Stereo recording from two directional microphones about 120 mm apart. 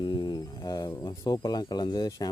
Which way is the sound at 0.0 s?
40° left (ahead or behind).